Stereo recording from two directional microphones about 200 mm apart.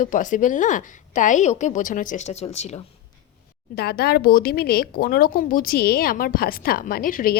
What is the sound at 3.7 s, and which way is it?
Speech, 50° left (ahead or behind).